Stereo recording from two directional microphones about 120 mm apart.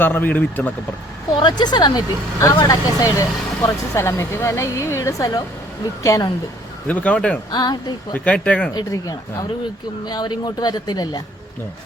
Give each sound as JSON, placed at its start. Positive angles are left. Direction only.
{"t": 0.0, "sound": "speech", "side_deg": 15}
{"t": 1.4, "sound": "speech", "side_deg": 40}
{"t": 6.8, "sound": "speech", "side_deg": 10}
{"t": 7.5, "sound": "speech", "side_deg": 35}
{"t": 8.1, "sound": "speech", "side_deg": 10}
{"t": 8.7, "sound": "speech", "side_deg": 30}